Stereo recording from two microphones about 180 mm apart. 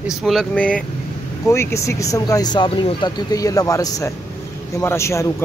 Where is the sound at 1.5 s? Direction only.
15° left (ahead or behind).